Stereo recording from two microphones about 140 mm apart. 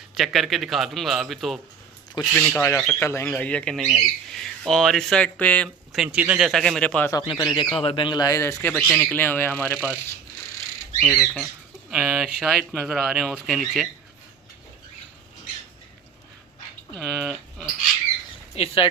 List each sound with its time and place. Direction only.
0.1 s speech: centre (ahead or behind)
2.3 s a man's voice: 15° left (ahead or behind)
3.2 s speech: 10° left (ahead or behind)
5.6 s speech: centre (ahead or behind)
7.1 s a man's voice: 25° left (ahead or behind)
8.7 s speech: 5° left (ahead or behind)
11.0 s speech: 5° left (ahead or behind)
17.0 s speech: centre (ahead or behind)
18.5 s speech: 40° left (ahead or behind)